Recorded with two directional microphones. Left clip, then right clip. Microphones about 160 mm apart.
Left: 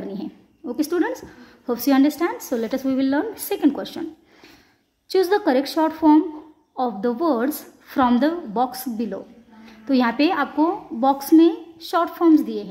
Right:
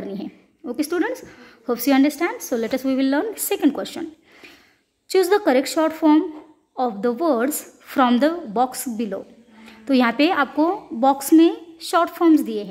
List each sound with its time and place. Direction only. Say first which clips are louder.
0.0 s a woman's voice: even; 20° right (ahead or behind)
5.1 s a woman's voice: right 2 dB; 20° right (ahead or behind)